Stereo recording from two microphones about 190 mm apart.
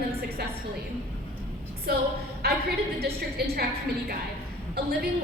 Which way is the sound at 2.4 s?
55° right (ahead or behind).